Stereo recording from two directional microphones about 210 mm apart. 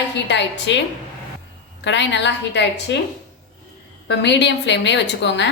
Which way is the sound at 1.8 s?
55° left (ahead or behind).